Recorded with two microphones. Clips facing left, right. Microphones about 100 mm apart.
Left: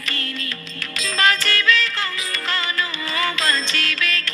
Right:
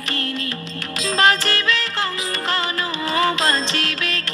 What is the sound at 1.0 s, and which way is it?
Music, 20° right (ahead or behind).